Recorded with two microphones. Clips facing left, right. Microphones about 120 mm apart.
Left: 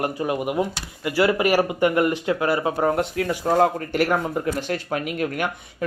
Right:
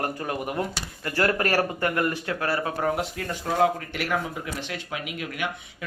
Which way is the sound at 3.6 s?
45° left (ahead or behind).